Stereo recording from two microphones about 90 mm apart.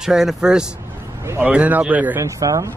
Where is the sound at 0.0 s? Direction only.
5° right (ahead or behind).